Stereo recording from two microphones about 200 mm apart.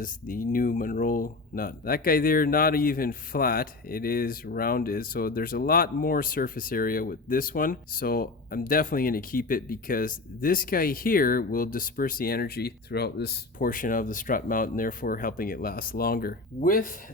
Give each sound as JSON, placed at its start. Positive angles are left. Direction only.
{"t": 0.0, "sound": "speech", "side_deg": 45}